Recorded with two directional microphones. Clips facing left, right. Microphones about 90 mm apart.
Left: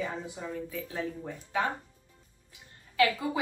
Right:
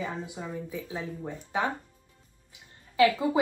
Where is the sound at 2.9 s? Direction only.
20° right (ahead or behind).